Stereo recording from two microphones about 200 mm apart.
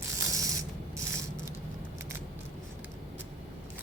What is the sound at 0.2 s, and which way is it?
Ratchet, 15° right (ahead or behind).